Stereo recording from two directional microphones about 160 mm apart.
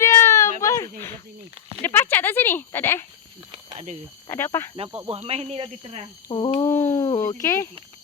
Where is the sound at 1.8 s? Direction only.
15° left (ahead or behind).